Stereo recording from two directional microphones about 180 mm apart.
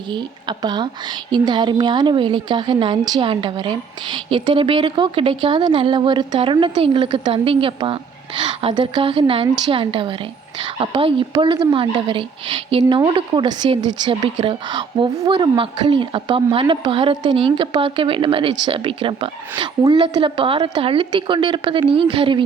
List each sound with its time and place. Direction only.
0.1 s a woman's voice: 25° right (ahead or behind)